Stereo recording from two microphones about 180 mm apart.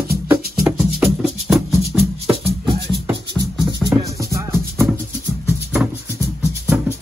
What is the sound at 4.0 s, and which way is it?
Music, 15° right (ahead or behind).